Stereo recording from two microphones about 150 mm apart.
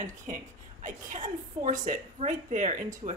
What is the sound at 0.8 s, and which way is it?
Speech, 60° right (ahead or behind).